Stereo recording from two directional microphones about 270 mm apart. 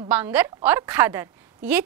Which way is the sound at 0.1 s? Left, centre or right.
Centre.